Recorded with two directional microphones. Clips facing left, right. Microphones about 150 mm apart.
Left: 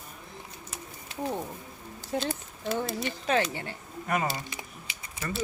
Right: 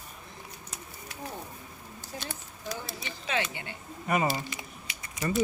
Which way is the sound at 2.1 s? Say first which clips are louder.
Left 11 dB; 70° left (ahead or behind).